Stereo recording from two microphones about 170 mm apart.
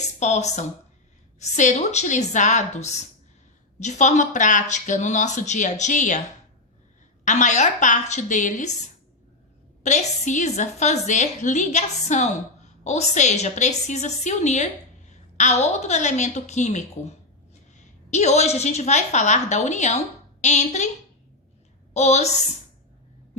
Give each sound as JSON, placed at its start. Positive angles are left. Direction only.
{"t": 0.2, "sound": "a woman's voice", "side_deg": 40}
{"t": 7.3, "sound": "a woman's voice", "side_deg": 45}
{"t": 9.8, "sound": "a woman's voice", "side_deg": 45}
{"t": 21.9, "sound": "a woman's voice", "side_deg": 40}